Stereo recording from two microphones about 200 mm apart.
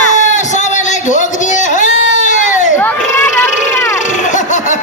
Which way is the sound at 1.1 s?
40° left (ahead or behind).